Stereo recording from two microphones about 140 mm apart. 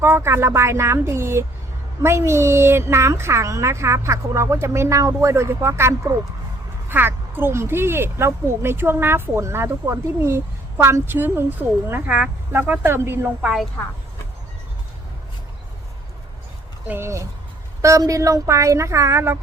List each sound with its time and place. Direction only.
0.0 s a woman's voice: 20° right (ahead or behind)
16.9 s a woman's voice: 20° right (ahead or behind)